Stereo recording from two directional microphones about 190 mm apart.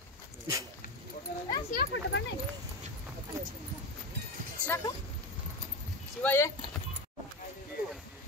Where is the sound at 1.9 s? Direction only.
70° left (ahead or behind).